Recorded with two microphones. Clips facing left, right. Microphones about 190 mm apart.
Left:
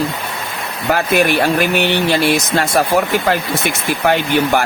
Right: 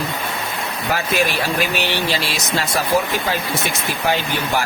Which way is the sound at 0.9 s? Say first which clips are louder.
Left 6 dB; 60° left (ahead or behind).